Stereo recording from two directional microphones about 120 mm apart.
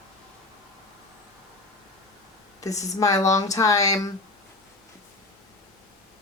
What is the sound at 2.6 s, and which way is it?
Speech, 30° left (ahead or behind).